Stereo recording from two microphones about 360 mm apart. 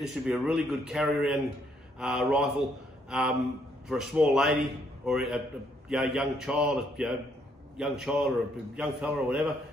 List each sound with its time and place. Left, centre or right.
0.0 s a man's voice: centre